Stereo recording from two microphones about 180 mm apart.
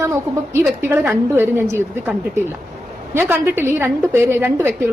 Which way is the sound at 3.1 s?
10° right (ahead or behind).